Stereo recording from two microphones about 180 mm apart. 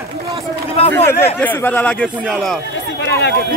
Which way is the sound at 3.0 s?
70° left (ahead or behind).